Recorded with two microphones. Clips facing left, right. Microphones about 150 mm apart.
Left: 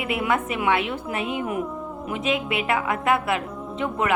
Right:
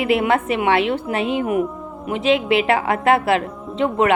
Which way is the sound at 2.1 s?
90° right.